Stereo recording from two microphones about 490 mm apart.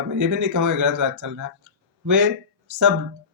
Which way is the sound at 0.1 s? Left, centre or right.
Right.